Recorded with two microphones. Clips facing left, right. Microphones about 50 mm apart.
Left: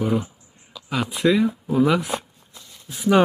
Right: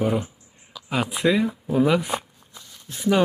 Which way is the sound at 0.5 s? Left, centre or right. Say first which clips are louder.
Even; centre.